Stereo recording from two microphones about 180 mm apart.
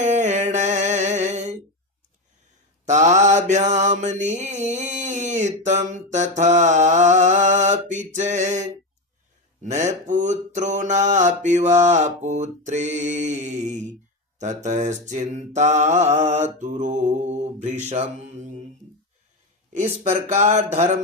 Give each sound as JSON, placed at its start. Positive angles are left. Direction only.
{"t": 0.0, "sound": "music", "side_deg": -40}
{"t": 2.8, "sound": "mantra", "side_deg": -40}
{"t": 19.7, "sound": "mantra", "side_deg": -40}